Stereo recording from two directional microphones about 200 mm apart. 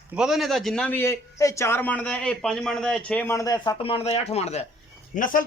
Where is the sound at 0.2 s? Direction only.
Centre (ahead or behind); by 3.9 s 20° left (ahead or behind).